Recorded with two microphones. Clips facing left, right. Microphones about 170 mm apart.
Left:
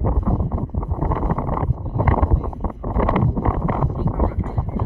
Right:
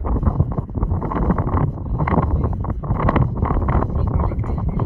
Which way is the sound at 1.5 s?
10° left (ahead or behind).